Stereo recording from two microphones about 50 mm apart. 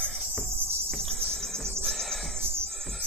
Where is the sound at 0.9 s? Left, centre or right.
Centre.